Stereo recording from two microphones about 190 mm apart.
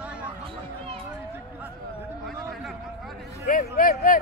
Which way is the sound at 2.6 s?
Centre (ahead or behind).